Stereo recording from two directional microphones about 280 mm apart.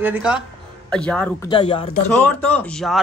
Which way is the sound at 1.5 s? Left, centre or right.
Centre.